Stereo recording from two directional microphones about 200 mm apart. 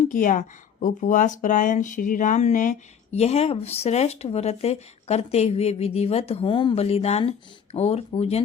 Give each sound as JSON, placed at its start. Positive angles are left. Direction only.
{"t": 0.0, "sound": "speech", "side_deg": 40}